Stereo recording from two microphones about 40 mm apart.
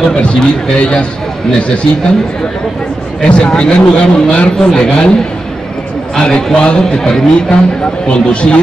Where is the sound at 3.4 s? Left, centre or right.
Left.